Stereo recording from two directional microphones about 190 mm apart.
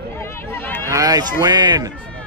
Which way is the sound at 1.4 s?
20° right (ahead or behind).